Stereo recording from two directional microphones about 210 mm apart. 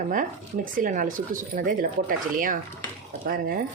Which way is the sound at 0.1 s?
40° right (ahead or behind).